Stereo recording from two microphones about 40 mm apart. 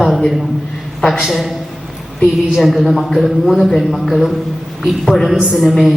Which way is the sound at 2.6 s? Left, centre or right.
Centre.